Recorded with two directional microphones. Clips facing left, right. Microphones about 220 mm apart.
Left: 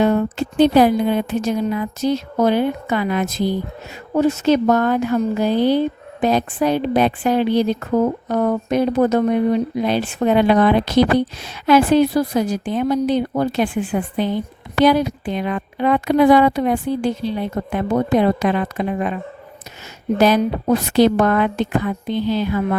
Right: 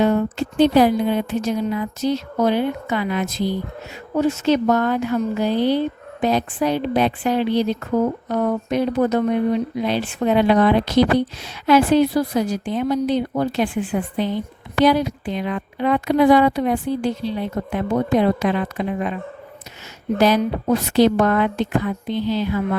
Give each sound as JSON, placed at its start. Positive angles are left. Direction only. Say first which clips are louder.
{"t": 0.0, "sound": "speech", "louder": "left 1 dB", "side_deg": 55}
{"t": 20.1, "sound": "speech", "louder": "left 2 dB", "side_deg": 50}